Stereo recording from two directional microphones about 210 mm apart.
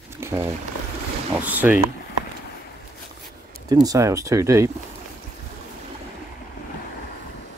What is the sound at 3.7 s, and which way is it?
Speech, 15° right (ahead or behind).